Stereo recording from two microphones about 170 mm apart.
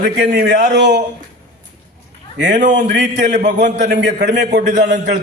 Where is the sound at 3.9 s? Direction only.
90° right.